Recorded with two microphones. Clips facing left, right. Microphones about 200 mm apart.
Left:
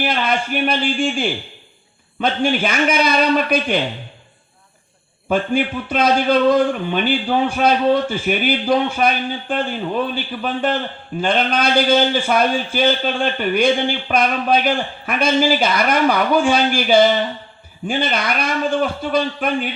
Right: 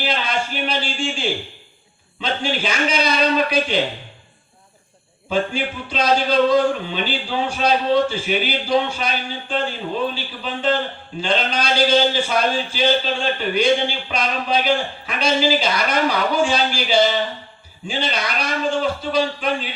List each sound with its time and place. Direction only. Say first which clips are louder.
0.0 s a man's voice: left 3 dB; 55° left (ahead or behind)
5.3 s a man's voice: left 4 dB; 55° left (ahead or behind)